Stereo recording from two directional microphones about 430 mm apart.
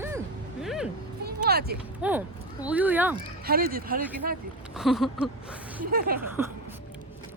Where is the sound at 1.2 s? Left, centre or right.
Right.